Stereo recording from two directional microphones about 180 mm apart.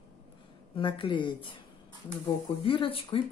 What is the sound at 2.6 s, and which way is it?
Speech, 30° left (ahead or behind).